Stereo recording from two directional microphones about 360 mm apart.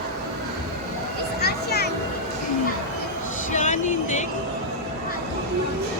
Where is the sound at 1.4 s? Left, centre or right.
Left.